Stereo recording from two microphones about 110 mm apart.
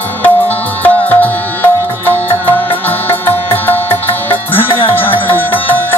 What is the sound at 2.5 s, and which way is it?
Music, 50° left (ahead or behind).